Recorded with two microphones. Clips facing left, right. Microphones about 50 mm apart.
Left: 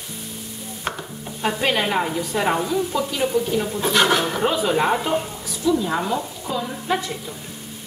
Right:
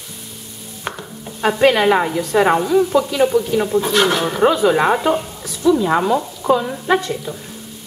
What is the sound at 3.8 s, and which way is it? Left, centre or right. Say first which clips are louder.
Speech: right 2 dB; centre.